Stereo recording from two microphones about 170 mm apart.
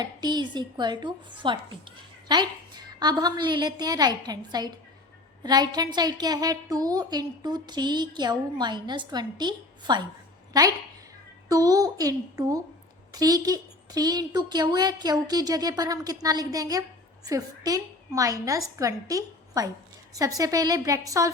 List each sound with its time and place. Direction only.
0.0 s a woman's voice: 25° right (ahead or behind)